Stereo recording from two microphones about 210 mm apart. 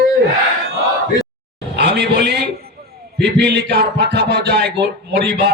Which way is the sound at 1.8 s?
50° right (ahead or behind).